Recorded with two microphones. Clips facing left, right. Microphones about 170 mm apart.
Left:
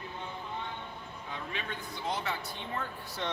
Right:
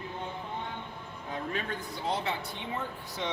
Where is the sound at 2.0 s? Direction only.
25° right (ahead or behind).